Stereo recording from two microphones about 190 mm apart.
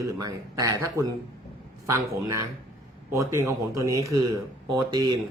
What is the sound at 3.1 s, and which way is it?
A man's voice, 15° right (ahead or behind).